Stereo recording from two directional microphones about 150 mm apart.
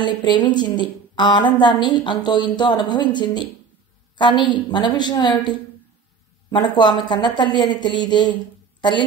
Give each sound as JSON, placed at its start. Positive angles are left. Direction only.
{"t": 0.0, "sound": "a woman's voice", "side_deg": 30}